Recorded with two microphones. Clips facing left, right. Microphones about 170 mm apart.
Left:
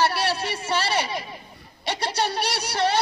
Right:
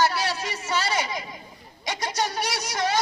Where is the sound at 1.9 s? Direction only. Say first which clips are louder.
Left 2 dB; 30° left (ahead or behind).